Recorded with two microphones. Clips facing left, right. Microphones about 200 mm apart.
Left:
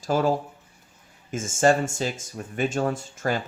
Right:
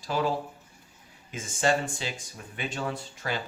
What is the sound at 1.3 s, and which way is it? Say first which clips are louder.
Speech: left 6 dB; 45° left (ahead or behind).